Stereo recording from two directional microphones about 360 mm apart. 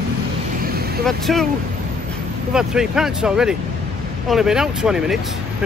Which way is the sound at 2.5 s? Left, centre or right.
Centre.